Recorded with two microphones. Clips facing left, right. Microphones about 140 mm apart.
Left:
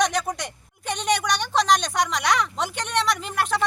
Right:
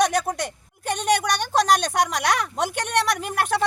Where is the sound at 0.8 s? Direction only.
50° right (ahead or behind).